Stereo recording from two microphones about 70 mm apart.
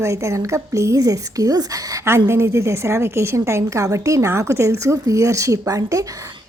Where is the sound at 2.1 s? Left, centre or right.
Right.